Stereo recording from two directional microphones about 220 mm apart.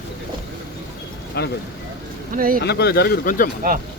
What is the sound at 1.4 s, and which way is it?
Speech, 50° left (ahead or behind).